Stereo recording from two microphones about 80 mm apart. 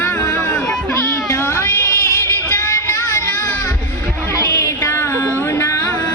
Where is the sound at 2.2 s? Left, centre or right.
Left.